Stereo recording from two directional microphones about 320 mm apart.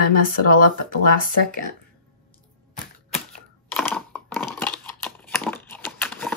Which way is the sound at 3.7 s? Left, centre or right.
Centre.